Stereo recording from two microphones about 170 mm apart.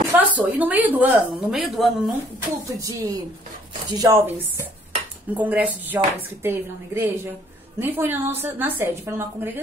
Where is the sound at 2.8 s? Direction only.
20° right (ahead or behind).